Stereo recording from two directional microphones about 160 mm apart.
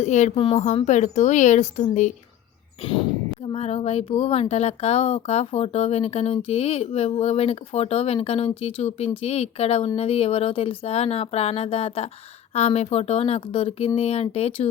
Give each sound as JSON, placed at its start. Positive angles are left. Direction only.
{"t": 0.0, "sound": "speech", "side_deg": 50}
{"t": 0.3, "sound": "speech", "side_deg": 35}
{"t": 0.9, "sound": "speech", "side_deg": 50}
{"t": 3.5, "sound": "speech", "side_deg": 40}